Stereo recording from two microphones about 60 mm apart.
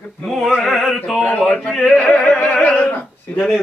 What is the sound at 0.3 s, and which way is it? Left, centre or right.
Opera, centre.